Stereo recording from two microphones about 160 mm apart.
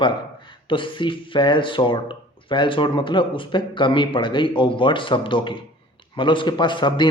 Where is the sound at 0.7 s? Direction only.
30° left (ahead or behind).